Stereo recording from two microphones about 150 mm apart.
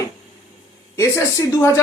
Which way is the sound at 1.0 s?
20° left (ahead or behind).